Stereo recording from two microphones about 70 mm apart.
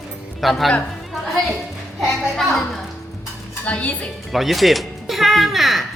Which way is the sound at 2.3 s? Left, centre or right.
Centre.